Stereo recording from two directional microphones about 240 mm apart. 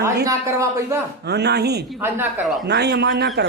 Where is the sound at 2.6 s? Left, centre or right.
Right.